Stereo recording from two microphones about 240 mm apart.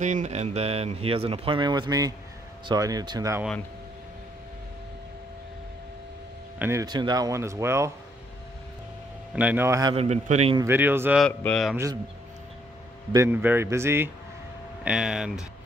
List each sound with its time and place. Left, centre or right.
0.0 s speech: right; by 3.4 s centre
6.6 s speech: centre
9.3 s speech: centre
9.9 s speech: right
10.6 s speech: centre
11.2 s speech: centre
11.7 s speech: centre
13.1 s speech: centre